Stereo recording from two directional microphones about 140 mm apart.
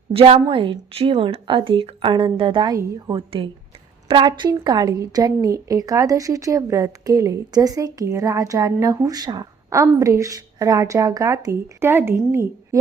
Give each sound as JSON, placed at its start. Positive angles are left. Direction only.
{"t": 0.1, "sound": "a woman's voice", "side_deg": -40}